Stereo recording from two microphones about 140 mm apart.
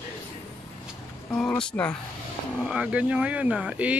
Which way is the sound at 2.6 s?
10° right (ahead or behind).